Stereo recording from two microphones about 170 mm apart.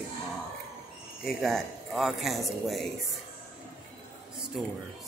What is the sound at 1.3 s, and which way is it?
Speech, centre (ahead or behind).